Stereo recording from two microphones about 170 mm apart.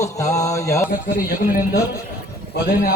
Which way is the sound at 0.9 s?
60° left (ahead or behind).